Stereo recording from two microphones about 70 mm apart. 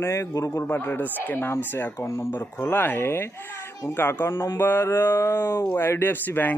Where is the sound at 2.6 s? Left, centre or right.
Left.